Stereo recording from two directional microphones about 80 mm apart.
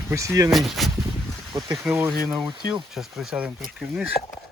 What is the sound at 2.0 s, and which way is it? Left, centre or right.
Speech, centre.